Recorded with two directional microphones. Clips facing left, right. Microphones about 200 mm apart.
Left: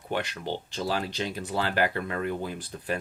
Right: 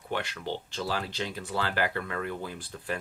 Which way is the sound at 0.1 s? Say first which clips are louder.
Left 2 dB; 15° left (ahead or behind).